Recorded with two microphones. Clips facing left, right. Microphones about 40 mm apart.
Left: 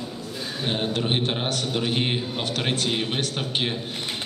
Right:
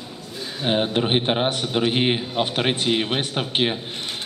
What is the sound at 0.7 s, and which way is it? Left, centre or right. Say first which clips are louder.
A man's voice: right 5 dB; right.